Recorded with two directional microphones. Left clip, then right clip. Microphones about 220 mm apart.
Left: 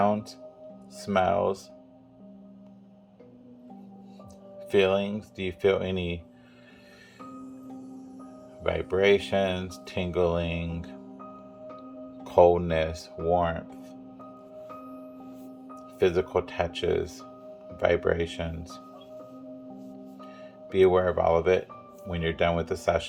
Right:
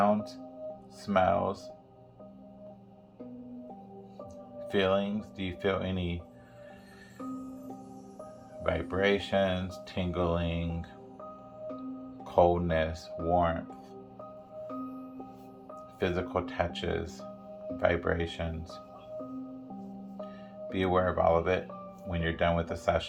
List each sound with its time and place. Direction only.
0.0 s music: 45° left (ahead or behind)
1.0 s speech: 45° left (ahead or behind)
4.6 s music: 40° left (ahead or behind)
5.0 s speech: 45° left (ahead or behind)
8.6 s speech: 40° left (ahead or behind)
12.2 s speech: 45° left (ahead or behind)
16.0 s speech: 40° left (ahead or behind)
20.7 s speech: 45° left (ahead or behind)